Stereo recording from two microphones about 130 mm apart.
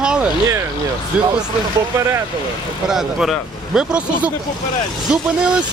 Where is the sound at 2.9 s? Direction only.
5° right (ahead or behind).